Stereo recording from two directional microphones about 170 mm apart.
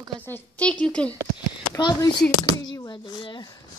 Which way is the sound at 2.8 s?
25° left (ahead or behind).